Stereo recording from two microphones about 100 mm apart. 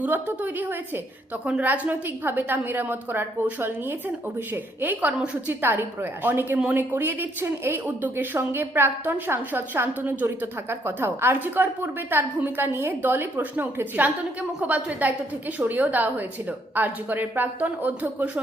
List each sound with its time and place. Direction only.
0.0 s a woman's voice: 20° right (ahead or behind)